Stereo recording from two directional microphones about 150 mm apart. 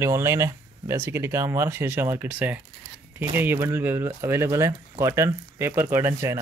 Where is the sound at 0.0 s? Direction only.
20° right (ahead or behind).